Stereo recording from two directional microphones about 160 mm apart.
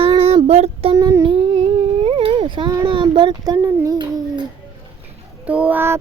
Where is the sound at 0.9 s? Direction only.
20° right (ahead or behind).